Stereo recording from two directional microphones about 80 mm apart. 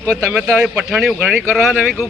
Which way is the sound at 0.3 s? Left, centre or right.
Centre.